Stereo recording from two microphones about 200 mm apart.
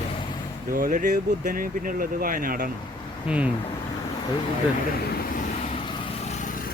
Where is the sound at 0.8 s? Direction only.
45° right (ahead or behind).